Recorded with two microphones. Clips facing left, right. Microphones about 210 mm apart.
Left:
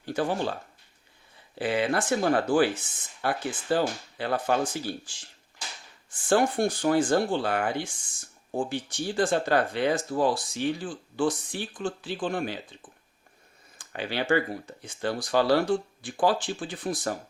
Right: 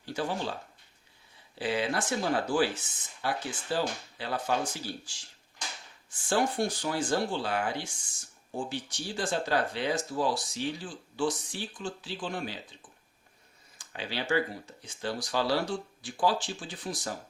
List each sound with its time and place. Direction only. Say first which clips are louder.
0.0 s speech: left 5 dB; 55° left (ahead or behind)
1.5 s speech: left 4 dB; 55° left (ahead or behind)
13.7 s speech: left 5 dB; 55° left (ahead or behind)